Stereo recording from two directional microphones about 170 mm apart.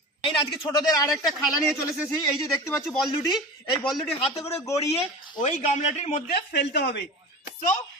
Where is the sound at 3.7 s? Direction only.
25° left (ahead or behind).